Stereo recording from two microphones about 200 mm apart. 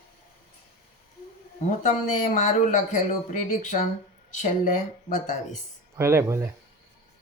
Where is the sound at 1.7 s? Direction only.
40° left (ahead or behind).